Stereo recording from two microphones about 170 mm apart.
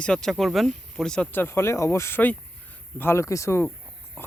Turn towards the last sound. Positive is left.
turn(degrees=15)  # may be behind; listen again after turning